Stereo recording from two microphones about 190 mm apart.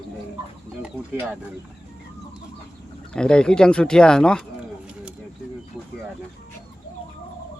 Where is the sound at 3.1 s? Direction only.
5° left (ahead or behind).